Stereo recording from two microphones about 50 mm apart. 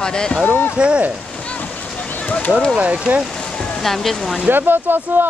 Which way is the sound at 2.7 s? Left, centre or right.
Right.